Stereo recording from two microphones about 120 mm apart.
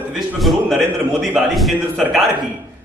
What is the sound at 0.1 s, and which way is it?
A man's voice, centre (ahead or behind).